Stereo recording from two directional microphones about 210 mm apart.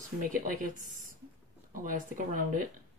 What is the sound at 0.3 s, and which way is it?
Speech, 40° right (ahead or behind).